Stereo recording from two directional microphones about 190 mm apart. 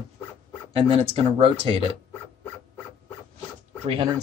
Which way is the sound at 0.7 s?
30° right (ahead or behind).